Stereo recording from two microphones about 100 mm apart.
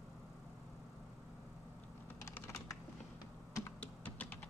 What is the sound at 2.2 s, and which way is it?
Typing, 30° left (ahead or behind).